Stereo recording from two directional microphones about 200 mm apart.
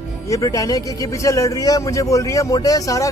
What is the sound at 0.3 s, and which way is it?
A man's voice, 15° left (ahead or behind).